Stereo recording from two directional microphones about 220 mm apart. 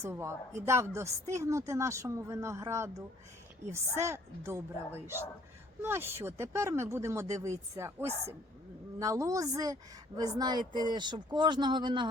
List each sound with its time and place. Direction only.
0.0 s a woman's voice: 10° right (ahead or behind)
5.8 s a woman's voice: 10° right (ahead or behind)